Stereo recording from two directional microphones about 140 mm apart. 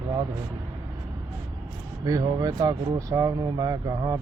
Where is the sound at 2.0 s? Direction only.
25° right (ahead or behind).